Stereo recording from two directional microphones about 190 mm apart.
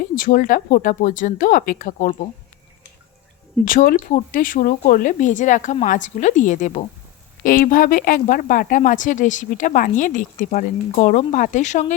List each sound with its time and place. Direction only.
0.0 s a woman's voice: 50° left (ahead or behind)
3.7 s a woman's voice: 45° left (ahead or behind)